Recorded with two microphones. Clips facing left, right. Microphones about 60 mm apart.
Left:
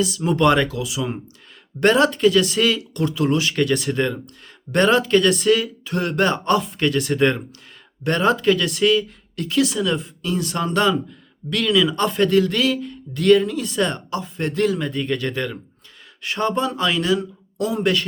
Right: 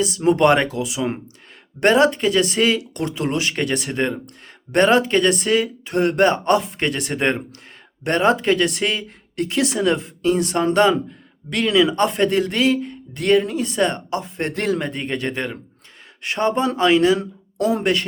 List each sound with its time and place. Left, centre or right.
0.0 s speech: right
17.6 s speech: right